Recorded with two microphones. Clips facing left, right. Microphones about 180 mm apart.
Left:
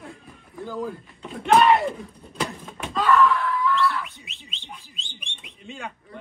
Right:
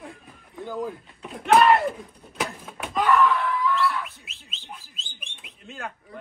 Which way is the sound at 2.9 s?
15° right (ahead or behind).